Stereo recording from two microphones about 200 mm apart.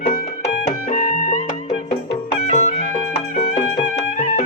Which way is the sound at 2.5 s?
35° left (ahead or behind).